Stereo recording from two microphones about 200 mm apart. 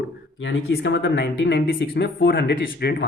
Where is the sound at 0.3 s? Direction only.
60° left (ahead or behind).